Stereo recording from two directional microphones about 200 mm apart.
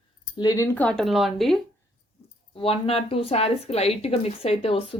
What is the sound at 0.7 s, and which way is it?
Speech, 5° left (ahead or behind).